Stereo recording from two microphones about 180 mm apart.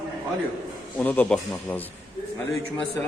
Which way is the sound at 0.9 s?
10° left (ahead or behind).